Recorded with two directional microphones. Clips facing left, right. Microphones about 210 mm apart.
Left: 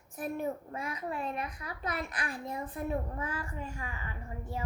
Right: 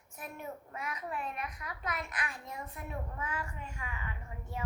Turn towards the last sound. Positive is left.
turn(degrees=35)  # may be behind; listen again after turning